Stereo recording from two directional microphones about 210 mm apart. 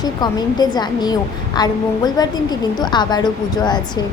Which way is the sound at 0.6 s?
20° left (ahead or behind).